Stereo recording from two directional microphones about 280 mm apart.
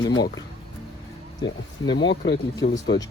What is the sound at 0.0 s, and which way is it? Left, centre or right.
Speech, centre.